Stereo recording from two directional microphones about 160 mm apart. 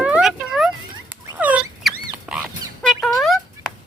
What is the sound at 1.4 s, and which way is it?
Rodents, 10° right (ahead or behind).